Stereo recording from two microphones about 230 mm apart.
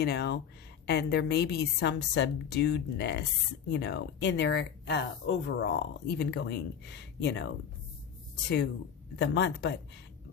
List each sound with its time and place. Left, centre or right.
0.0 s speech: left
9.1 s speech: left